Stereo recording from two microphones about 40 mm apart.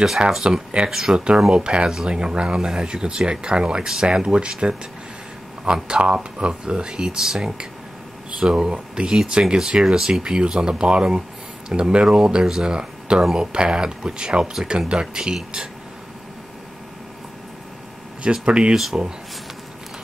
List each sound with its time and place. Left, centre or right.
0.2 s speech: centre
1.5 s speech: right
9.8 s speech: centre
18.2 s speech: right